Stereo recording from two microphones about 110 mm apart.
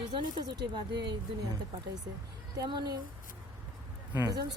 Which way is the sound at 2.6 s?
45° right (ahead or behind).